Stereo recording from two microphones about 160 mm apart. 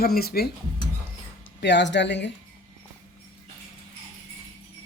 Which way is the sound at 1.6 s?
90° left.